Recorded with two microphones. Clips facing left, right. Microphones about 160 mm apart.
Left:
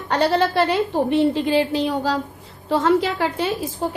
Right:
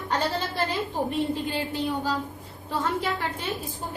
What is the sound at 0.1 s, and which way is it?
A woman's voice, 75° left (ahead or behind).